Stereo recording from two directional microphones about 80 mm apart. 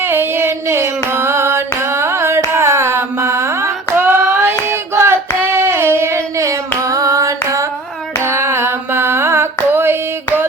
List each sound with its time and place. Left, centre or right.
0.0 s a sound: right
4.7 s child singing: right
8.2 s music: right